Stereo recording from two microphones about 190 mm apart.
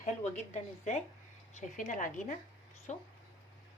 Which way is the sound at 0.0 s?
40° left (ahead or behind).